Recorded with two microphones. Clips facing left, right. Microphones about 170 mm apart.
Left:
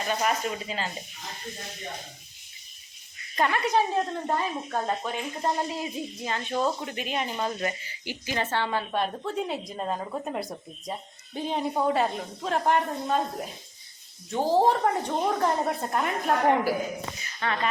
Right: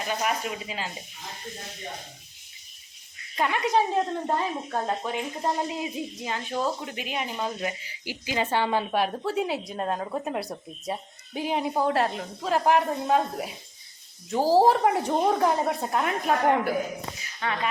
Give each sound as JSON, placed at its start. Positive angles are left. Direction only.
{"t": 0.1, "sound": "speech", "side_deg": -5}
{"t": 3.3, "sound": "speech", "side_deg": -5}
{"t": 3.6, "sound": "a woman's voice", "side_deg": -20}